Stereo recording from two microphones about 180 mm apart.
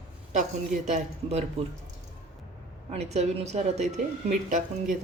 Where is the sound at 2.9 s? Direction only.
35° right (ahead or behind).